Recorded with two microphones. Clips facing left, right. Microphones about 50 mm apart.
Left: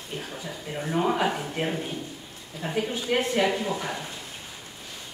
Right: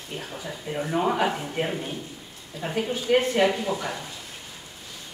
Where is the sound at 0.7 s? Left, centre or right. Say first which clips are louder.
Right 1 dB; centre.